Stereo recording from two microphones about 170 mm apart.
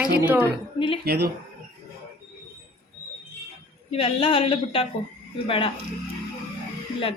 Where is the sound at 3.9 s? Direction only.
35° left (ahead or behind).